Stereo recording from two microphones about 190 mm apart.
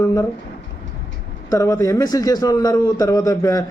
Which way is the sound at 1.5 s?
15° left (ahead or behind).